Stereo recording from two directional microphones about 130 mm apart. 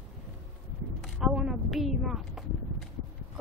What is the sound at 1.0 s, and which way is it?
A woman's voice, centre (ahead or behind).